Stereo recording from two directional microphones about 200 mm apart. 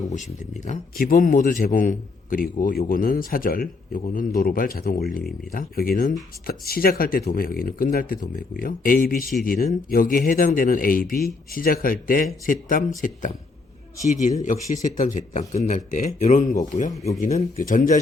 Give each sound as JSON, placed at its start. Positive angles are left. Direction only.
{"t": 0.1, "sound": "a man's voice", "side_deg": 35}